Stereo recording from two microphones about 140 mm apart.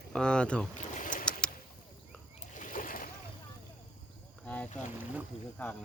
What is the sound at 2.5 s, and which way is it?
Splash, 70° left (ahead or behind).